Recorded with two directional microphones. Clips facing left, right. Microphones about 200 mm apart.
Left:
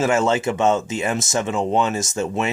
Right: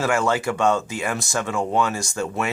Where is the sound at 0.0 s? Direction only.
20° left (ahead or behind).